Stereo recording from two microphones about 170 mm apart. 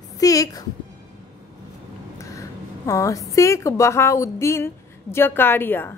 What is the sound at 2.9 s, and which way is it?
A woman's voice, 20° left (ahead or behind).